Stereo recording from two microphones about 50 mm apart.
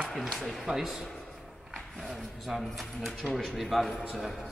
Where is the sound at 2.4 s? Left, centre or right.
Centre.